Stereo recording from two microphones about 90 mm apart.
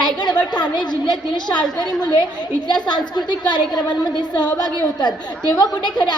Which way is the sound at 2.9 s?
55° left (ahead or behind).